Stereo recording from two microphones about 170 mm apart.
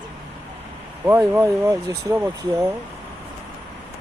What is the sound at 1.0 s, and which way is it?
Speech, 10° right (ahead or behind).